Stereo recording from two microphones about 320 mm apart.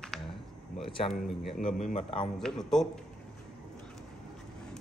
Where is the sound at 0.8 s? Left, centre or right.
Centre.